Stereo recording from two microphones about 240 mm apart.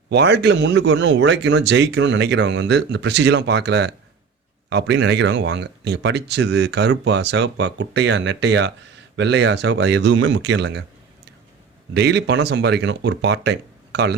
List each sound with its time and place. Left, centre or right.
0.1 s speech: right
11.9 s speech: right